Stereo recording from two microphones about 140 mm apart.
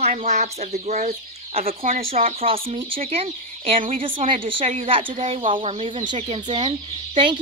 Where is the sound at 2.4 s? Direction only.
40° right (ahead or behind).